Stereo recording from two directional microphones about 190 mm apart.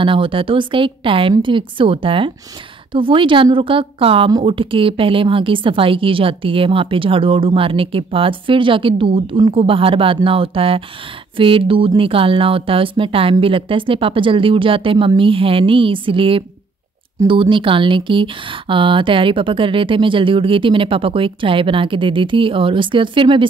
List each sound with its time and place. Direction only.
0.0 s a woman's voice: 25° right (ahead or behind)